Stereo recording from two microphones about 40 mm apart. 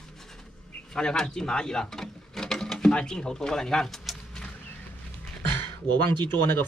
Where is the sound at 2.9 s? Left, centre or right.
Left.